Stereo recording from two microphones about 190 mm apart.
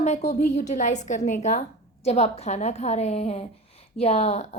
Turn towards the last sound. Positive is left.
turn(degrees=35)  # may be behind; listen again after turning